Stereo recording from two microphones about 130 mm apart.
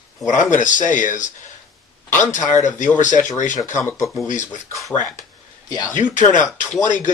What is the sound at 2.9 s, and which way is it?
Speech, 75° left (ahead or behind).